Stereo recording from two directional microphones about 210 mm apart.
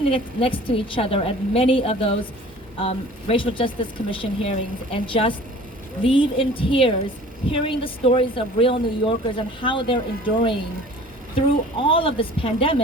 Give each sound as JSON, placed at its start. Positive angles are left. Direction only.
{"t": 0.1, "sound": "a woman's voice", "side_deg": 25}